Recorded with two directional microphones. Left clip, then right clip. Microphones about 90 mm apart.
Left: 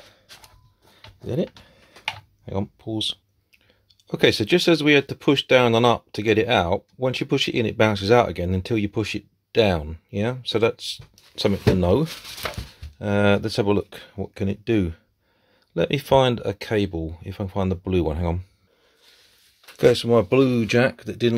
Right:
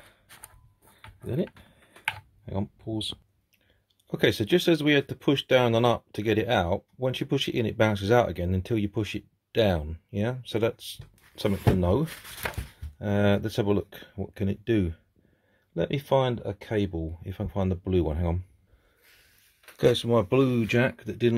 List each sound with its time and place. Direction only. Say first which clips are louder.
0.9 s a sound: left 5 dB; 20° left (ahead or behind)
2.4 s speech: left 6 dB; 15° left (ahead or behind)
4.1 s speech: left 5 dB; 15° left (ahead or behind)
13.0 s speech: left 5 dB; 10° left (ahead or behind)
15.7 s speech: left 6 dB; 30° left (ahead or behind)
16.7 s speech: left 4 dB; 20° left (ahead or behind)
19.8 s speech: left 6 dB; 10° left (ahead or behind)